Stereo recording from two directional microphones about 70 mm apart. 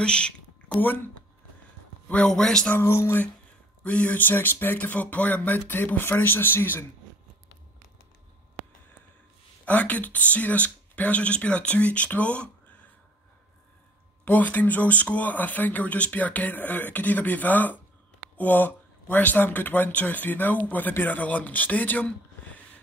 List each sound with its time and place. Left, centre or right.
0.0 s a man's voice: centre
0.7 s speech: left
2.0 s a man's voice: centre
2.7 s speech: left
3.8 s speech: centre
9.7 s speech: left
14.2 s speech: left